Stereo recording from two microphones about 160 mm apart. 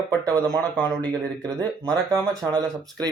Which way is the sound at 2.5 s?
25° right (ahead or behind).